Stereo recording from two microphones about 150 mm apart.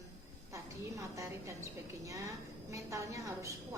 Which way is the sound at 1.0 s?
20° right (ahead or behind).